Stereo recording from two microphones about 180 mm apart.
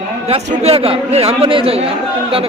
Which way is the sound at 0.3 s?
35° right (ahead or behind).